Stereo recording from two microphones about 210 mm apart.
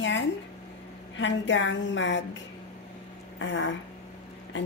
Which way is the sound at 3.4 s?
60° left (ahead or behind).